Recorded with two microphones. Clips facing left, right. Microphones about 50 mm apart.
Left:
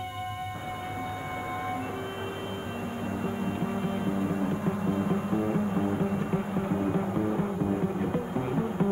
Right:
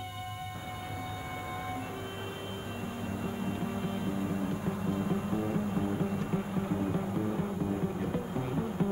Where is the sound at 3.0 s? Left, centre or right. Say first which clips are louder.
Left 4 dB; centre.